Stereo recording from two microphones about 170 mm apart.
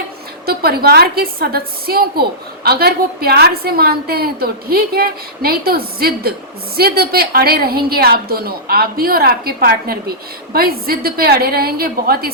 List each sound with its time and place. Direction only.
0.4 s a woman's voice: 65° right (ahead or behind)